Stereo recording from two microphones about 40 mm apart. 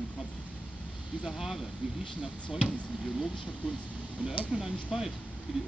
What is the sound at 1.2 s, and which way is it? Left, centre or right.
Speech, centre.